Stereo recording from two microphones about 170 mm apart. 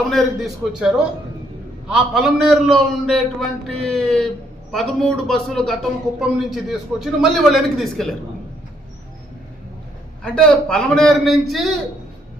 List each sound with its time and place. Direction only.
0.1 s a man's voice: centre (ahead or behind)
10.2 s a man's voice: 5° left (ahead or behind)